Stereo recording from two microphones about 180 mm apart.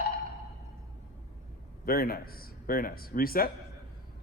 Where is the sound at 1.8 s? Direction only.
55° left (ahead or behind).